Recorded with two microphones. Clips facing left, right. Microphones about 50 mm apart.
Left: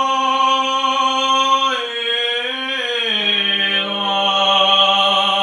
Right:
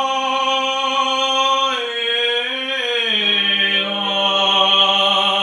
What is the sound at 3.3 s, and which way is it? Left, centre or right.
Mantra, centre.